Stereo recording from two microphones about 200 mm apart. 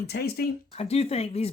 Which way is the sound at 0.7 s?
30° left (ahead or behind).